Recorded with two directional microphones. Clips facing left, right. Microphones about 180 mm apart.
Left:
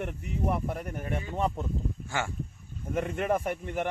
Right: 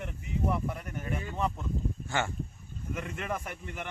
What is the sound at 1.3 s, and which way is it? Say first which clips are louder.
Speech: left 4 dB; 35° left (ahead or behind).